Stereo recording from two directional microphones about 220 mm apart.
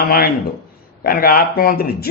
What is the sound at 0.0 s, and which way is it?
A man's voice, 45° left (ahead or behind).